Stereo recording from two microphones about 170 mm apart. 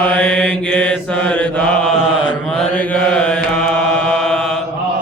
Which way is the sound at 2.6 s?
5° left (ahead or behind).